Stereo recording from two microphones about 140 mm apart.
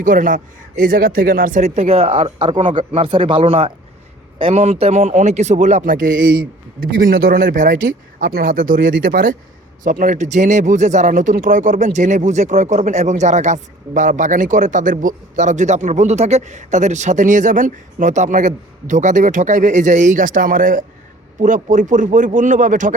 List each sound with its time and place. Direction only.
0.0 s a man's voice: 70° right (ahead or behind)